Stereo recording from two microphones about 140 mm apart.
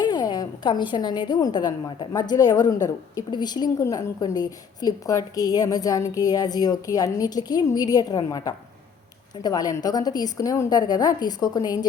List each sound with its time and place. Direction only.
0.0 s a woman's voice: 30° left (ahead or behind)